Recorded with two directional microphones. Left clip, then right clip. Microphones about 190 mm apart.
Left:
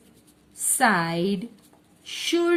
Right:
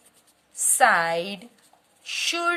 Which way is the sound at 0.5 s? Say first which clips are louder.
Right 3 dB; 30° right (ahead or behind).